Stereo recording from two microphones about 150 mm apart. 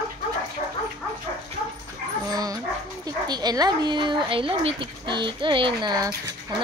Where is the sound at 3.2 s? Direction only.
25° right (ahead or behind).